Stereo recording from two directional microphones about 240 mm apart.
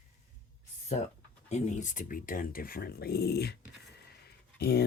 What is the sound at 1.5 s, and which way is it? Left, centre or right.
Speech, left.